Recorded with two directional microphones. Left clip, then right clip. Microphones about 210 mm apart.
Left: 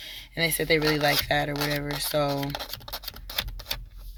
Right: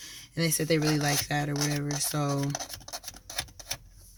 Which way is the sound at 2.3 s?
45° left (ahead or behind).